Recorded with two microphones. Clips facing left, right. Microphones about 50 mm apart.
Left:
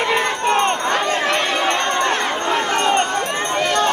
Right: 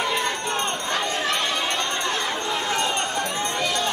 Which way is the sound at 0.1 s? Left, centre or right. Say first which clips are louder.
Left 7 dB; left.